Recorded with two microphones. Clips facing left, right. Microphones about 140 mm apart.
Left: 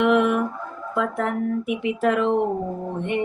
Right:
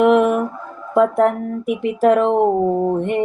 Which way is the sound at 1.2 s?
45° right (ahead or behind).